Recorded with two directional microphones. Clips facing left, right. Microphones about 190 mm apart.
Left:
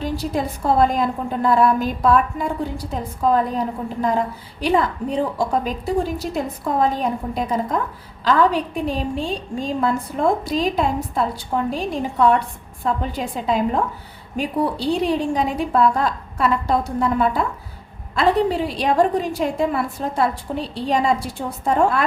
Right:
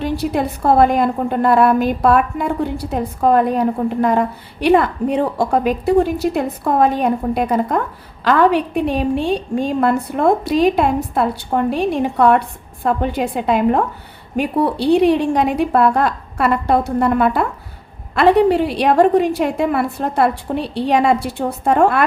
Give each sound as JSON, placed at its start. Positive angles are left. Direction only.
{"t": 0.0, "sound": "a woman's voice", "side_deg": -65}